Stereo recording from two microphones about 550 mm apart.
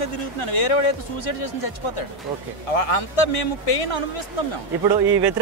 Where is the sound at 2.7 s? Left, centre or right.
Left.